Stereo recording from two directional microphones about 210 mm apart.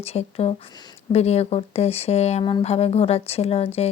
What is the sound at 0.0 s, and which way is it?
Speech, 30° left (ahead or behind).